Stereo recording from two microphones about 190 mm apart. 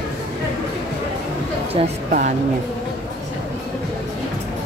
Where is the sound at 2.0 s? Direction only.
45° right (ahead or behind).